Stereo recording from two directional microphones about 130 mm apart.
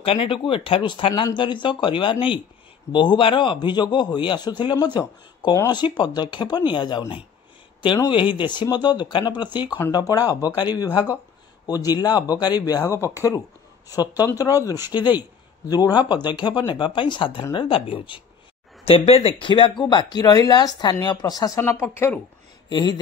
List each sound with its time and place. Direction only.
0.0 s speech: 45° left (ahead or behind)
9.8 s speech: 25° left (ahead or behind)
11.6 s speech: 30° left (ahead or behind)
22.7 s speech: 35° left (ahead or behind)